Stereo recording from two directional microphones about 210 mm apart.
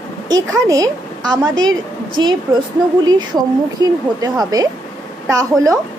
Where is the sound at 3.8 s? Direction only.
20° right (ahead or behind).